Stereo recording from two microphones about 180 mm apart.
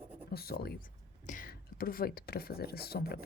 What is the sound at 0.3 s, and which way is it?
Speech, 60° left (ahead or behind).